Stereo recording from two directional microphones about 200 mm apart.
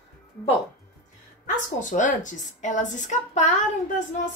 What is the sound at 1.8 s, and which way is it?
A woman's voice, 40° left (ahead or behind).